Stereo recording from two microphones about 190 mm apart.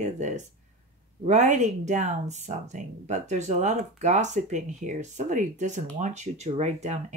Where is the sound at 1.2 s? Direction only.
40° right (ahead or behind).